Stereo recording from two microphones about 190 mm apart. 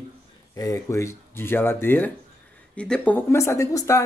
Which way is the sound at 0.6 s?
15° left (ahead or behind).